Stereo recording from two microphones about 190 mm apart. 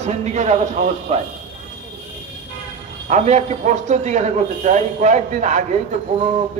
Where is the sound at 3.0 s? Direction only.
40° right (ahead or behind).